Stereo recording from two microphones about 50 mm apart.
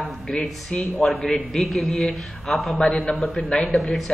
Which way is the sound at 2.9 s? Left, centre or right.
Left.